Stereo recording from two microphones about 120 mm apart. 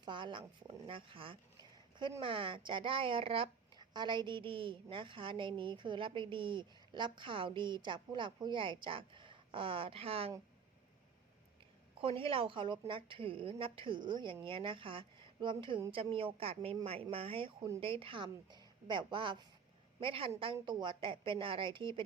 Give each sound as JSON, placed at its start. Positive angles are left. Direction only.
{"t": 0.0, "sound": "a sound", "side_deg": -40}
{"t": 0.9, "sound": "a woman's voice", "side_deg": -45}
{"t": 3.9, "sound": "a woman's voice", "side_deg": -40}
{"t": 11.9, "sound": "a woman's voice", "side_deg": -50}